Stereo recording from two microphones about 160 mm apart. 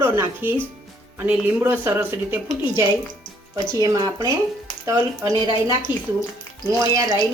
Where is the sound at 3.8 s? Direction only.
20° right (ahead or behind).